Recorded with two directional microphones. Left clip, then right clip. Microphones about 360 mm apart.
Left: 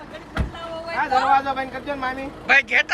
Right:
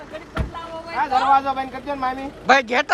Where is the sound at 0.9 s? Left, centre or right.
Centre.